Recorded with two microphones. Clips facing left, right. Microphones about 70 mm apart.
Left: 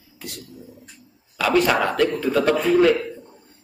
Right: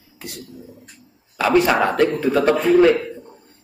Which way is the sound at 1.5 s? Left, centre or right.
Centre.